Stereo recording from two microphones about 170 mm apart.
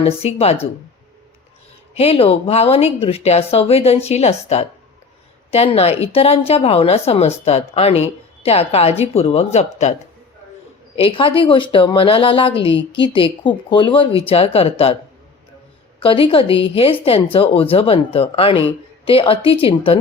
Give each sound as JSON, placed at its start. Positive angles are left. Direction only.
{"t": 0.0, "sound": "a woman's voice", "side_deg": 35}
{"t": 2.0, "sound": "a woman's voice", "side_deg": 35}
{"t": 10.9, "sound": "a woman's voice", "side_deg": 30}
{"t": 16.0, "sound": "a woman's voice", "side_deg": 30}